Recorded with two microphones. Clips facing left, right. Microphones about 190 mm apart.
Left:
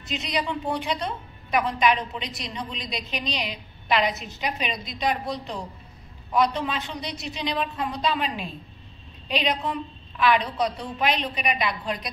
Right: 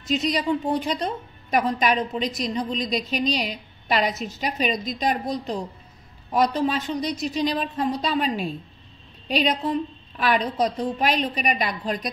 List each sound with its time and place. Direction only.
0.1 s a woman's voice: 45° right (ahead or behind)